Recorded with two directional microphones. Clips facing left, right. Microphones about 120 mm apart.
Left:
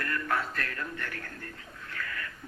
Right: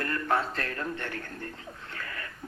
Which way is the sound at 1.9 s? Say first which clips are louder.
Left 2 dB; 30° right (ahead or behind).